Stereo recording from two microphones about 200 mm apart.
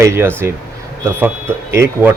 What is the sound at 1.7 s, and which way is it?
Speech, 15° right (ahead or behind).